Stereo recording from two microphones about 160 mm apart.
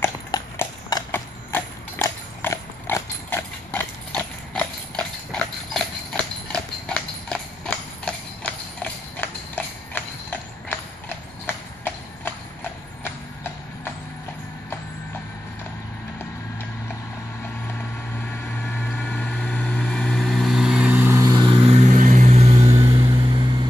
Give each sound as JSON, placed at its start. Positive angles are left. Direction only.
{"t": 0.6, "sound": "horse", "side_deg": 20}
{"t": 11.4, "sound": "clip-clop", "side_deg": 15}
{"t": 13.0, "sound": "vehicle", "side_deg": 15}
{"t": 18.6, "sound": "vehicle", "side_deg": 10}
{"t": 21.7, "sound": "vehicle", "side_deg": -45}
{"t": 22.8, "sound": "vehicle", "side_deg": -35}